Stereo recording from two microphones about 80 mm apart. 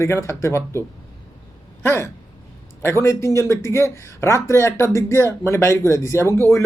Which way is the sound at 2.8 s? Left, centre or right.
Left.